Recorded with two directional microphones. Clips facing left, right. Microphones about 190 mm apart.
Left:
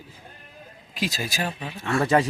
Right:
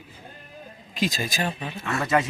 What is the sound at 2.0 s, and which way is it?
Speech, 30° left (ahead or behind).